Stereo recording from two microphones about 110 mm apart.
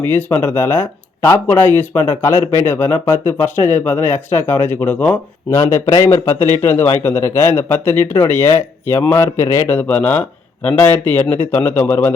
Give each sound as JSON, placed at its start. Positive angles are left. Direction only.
{"t": 0.0, "sound": "speech", "side_deg": 15}
{"t": 5.5, "sound": "speech", "side_deg": 25}